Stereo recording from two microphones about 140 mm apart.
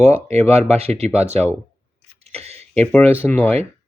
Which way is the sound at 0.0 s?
50° right (ahead or behind).